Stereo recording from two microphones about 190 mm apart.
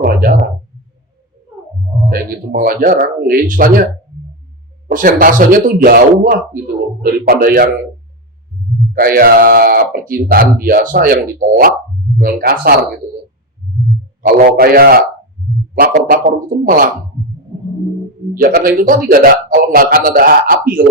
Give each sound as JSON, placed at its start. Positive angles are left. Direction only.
{"t": 0.0, "sound": "a sound", "side_deg": -50}
{"t": 2.0, "sound": "speech", "side_deg": -50}
{"t": 4.9, "sound": "speech", "side_deg": -45}
{"t": 8.9, "sound": "speech", "side_deg": -50}
{"t": 14.2, "sound": "speech", "side_deg": -50}
{"t": 18.4, "sound": "speech", "side_deg": -50}